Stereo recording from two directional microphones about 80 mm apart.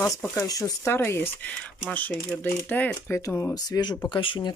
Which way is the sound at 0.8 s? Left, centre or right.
Left.